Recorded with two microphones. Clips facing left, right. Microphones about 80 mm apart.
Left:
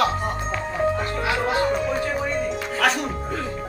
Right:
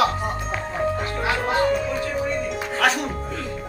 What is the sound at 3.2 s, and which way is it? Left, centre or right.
Music, left.